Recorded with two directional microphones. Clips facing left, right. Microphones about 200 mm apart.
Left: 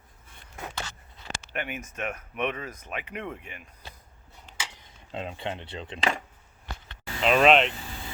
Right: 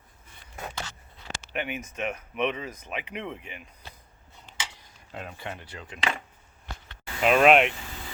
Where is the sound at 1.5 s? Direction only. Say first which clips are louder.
Right 2 dB; centre (ahead or behind).